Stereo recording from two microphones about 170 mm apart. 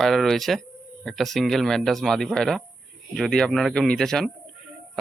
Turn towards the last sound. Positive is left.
turn(degrees=0)  # may be behind; listen again after turning